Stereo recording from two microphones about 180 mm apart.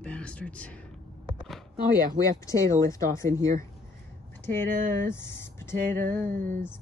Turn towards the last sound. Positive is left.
turn(degrees=-50)  # may be behind; listen again after turning